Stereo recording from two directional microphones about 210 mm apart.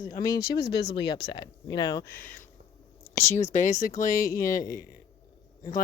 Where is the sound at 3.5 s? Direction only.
35° left (ahead or behind).